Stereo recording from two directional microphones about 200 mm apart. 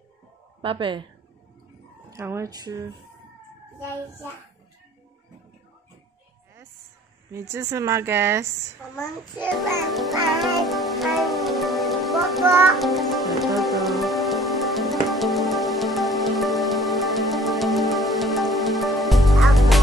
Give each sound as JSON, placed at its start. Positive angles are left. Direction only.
{"t": 0.6, "sound": "a woman's voice", "side_deg": -25}
{"t": 2.0, "sound": "a woman's voice", "side_deg": -15}
{"t": 7.2, "sound": "a woman's voice", "side_deg": -15}
{"t": 9.6, "sound": "music", "side_deg": 0}